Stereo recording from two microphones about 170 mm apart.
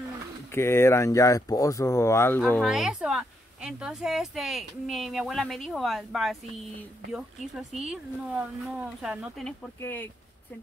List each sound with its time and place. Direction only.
0.6 s speech: 15° left (ahead or behind)
2.6 s speech: centre (ahead or behind)
9.8 s speech: 15° left (ahead or behind)